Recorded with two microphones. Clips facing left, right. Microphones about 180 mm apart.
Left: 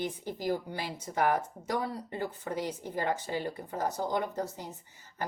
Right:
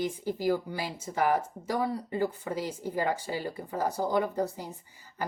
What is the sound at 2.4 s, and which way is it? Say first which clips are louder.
Speech: right 1 dB; 50° left (ahead or behind).